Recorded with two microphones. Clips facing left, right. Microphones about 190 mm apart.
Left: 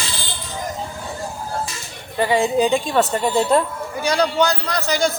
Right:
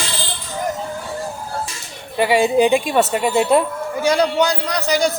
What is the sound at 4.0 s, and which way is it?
A man's voice, 25° right (ahead or behind).